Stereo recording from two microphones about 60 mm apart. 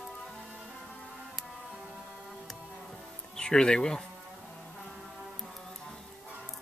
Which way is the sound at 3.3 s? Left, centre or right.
Centre.